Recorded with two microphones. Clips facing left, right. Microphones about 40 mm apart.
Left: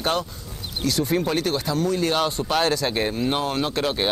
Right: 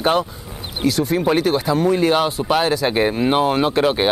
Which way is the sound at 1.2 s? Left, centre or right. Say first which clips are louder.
Right 7 dB; centre.